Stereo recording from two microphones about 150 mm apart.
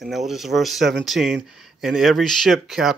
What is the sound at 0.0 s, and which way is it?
Speech, centre (ahead or behind).